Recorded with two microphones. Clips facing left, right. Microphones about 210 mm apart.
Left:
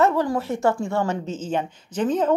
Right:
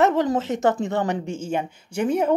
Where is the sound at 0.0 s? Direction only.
20° right (ahead or behind).